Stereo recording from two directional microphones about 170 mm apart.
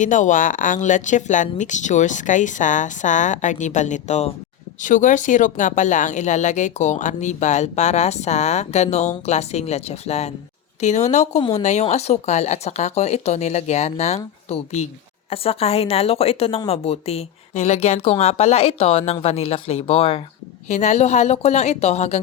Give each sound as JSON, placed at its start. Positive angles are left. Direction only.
{"t": 0.0, "sound": "speech", "side_deg": 50}